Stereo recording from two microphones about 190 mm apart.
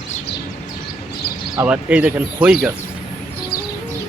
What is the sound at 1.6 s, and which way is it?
Speech, 5° right (ahead or behind).